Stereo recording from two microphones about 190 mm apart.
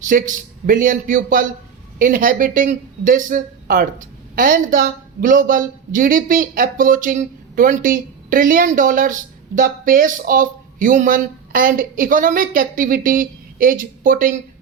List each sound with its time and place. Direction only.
0.0 s speech: 45° right (ahead or behind)